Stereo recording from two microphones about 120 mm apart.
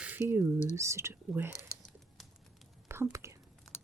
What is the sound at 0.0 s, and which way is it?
Speech, 15° right (ahead or behind).